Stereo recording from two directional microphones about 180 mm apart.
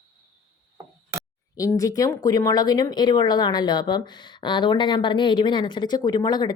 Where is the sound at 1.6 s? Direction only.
20° left (ahead or behind).